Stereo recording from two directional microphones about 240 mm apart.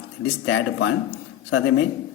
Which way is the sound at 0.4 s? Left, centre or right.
Left.